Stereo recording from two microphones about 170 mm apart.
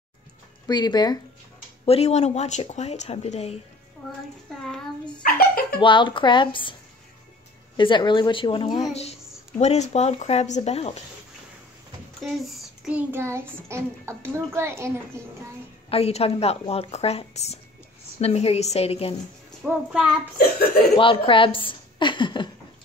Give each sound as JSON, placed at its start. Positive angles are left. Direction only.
{"t": 0.7, "sound": "a woman's voice", "side_deg": 25}
{"t": 1.9, "sound": "speech", "side_deg": 40}
{"t": 4.6, "sound": "a child's voice", "side_deg": 0}
{"t": 5.2, "sound": "giggle", "side_deg": 60}
{"t": 5.8, "sound": "a woman's voice", "side_deg": 30}
{"t": 7.7, "sound": "a woman's voice", "side_deg": 30}
{"t": 8.9, "sound": "speech", "side_deg": 40}
{"t": 12.2, "sound": "child singing", "side_deg": -5}
{"t": 15.9, "sound": "speech", "side_deg": 35}
{"t": 19.6, "sound": "a child's voice", "side_deg": -5}
{"t": 20.9, "sound": "a woman's voice", "side_deg": 30}